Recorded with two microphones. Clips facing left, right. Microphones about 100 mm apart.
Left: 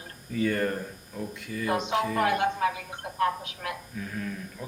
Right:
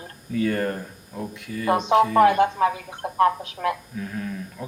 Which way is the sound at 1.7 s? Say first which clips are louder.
Right 9 dB; 40° right (ahead or behind).